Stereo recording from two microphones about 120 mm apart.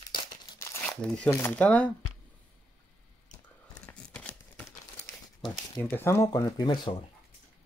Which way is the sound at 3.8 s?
10° left (ahead or behind).